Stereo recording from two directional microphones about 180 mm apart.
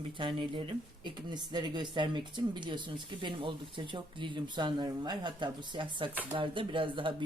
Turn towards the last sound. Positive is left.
turn(degrees=-30)  # may be behind; listen again after turning